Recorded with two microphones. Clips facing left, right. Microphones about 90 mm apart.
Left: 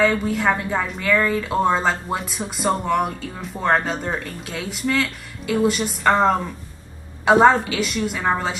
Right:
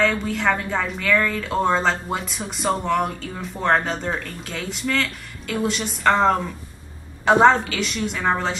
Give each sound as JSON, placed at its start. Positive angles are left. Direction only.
{"t": 0.0, "sound": "a woman's voice", "side_deg": 5}